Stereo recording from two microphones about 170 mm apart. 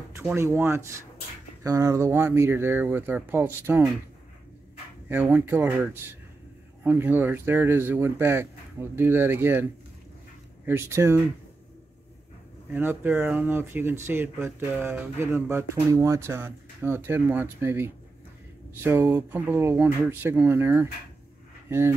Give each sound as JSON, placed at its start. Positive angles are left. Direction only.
{"t": 0.2, "sound": "speech", "side_deg": -10}
{"t": 5.0, "sound": "speech", "side_deg": -10}
{"t": 12.7, "sound": "speech", "side_deg": -10}